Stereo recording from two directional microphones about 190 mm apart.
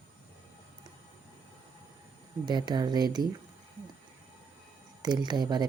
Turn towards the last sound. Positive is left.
turn(degrees=-20)  # may be behind; listen again after turning